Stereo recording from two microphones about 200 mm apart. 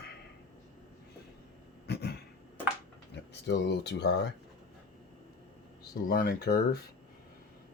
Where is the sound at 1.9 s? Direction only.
55° left (ahead or behind).